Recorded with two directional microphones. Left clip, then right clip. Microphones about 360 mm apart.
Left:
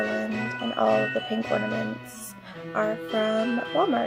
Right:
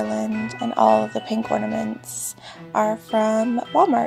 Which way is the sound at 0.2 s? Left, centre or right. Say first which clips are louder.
Right 3 dB; right.